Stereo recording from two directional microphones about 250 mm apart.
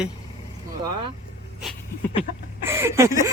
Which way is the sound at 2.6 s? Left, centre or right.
Centre.